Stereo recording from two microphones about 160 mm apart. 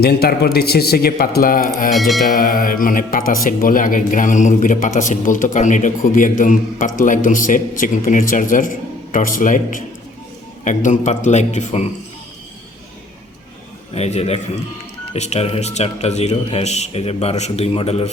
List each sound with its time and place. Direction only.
0.0 s a man's voice: 80° left; by 1.9 s 60° left (ahead or behind)
1.9 s music: centre (ahead or behind)
2.3 s a man's voice: 60° left (ahead or behind); by 11.9 s 45° left (ahead or behind)
13.9 s a man's voice: 40° left (ahead or behind)